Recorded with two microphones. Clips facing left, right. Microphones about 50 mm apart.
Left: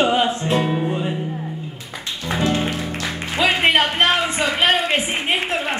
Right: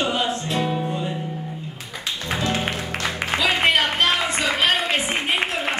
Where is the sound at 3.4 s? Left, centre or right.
Centre.